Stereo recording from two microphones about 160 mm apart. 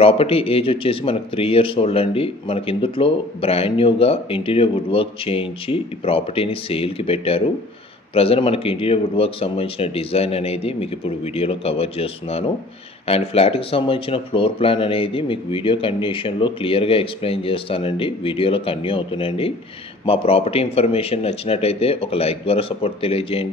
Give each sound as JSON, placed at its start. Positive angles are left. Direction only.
{"t": 0.0, "sound": "speech", "side_deg": 35}